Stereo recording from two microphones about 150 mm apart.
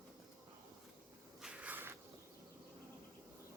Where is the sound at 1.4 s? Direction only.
10° right (ahead or behind).